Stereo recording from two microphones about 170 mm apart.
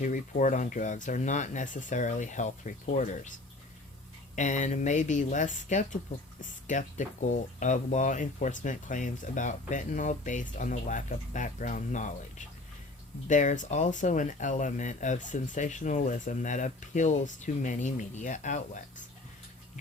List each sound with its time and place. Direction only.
0.0 s speech: 50° left (ahead or behind)
4.4 s speech: 45° left (ahead or behind)